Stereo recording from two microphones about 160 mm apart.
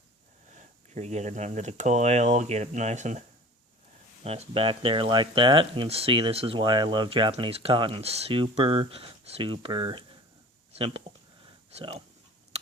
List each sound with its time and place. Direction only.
0.5 s speech: 45° right (ahead or behind)